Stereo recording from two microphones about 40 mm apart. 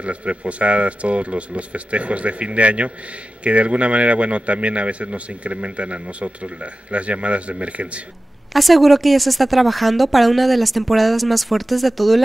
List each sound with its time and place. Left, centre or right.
0.0 s a man's voice: right
8.5 s speech: centre